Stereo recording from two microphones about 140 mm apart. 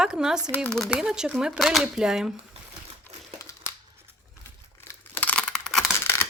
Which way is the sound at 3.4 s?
20° left (ahead or behind).